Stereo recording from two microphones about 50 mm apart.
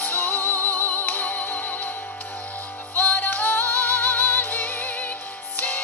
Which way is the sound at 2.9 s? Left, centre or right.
Left.